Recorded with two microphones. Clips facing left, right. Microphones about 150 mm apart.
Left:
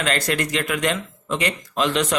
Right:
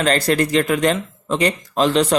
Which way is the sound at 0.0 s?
35° right (ahead or behind).